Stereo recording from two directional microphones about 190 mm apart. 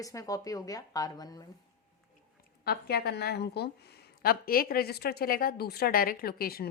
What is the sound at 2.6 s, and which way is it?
A woman's voice, 55° left (ahead or behind).